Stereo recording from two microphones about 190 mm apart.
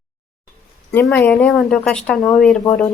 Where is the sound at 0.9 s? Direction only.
10° left (ahead or behind).